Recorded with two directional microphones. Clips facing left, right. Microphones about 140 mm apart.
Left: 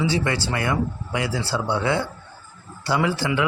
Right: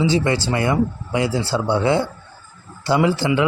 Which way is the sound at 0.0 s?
25° right (ahead or behind).